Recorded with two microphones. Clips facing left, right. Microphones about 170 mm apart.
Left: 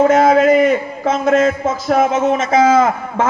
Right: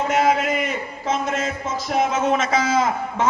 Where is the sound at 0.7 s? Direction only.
50° left (ahead or behind).